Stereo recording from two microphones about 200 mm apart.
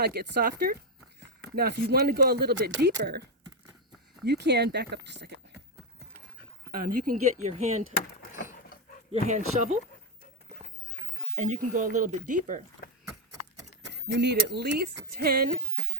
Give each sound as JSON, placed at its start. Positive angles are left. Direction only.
{"t": 0.0, "sound": "speech", "side_deg": -55}
{"t": 6.7, "sound": "speech", "side_deg": -45}
{"t": 7.4, "sound": "speech", "side_deg": -35}
{"t": 9.1, "sound": "speech", "side_deg": -35}
{"t": 11.4, "sound": "speech", "side_deg": -40}
{"t": 14.1, "sound": "speech", "side_deg": -60}